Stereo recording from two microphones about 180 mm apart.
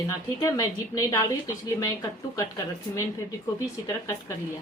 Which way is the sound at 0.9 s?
20° left (ahead or behind).